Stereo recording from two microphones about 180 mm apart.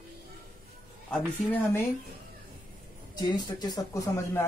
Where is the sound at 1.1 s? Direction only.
10° left (ahead or behind).